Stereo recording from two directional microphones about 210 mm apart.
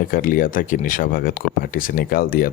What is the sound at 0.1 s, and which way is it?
Speech, 40° left (ahead or behind).